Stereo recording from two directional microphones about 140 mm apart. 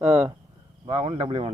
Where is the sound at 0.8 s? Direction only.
40° right (ahead or behind).